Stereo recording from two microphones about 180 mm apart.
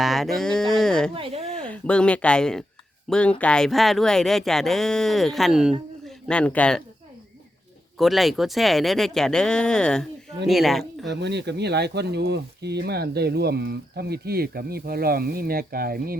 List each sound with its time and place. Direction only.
0.0 s speech: centre (ahead or behind)
1.1 s a woman's voice: 30° right (ahead or behind)
1.5 s speech: 5° left (ahead or behind)
7.9 s speech: centre (ahead or behind)
11.1 s speech: 70° right (ahead or behind)